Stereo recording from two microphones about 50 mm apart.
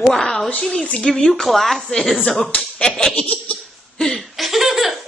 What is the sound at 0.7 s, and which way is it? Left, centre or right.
Speech, left.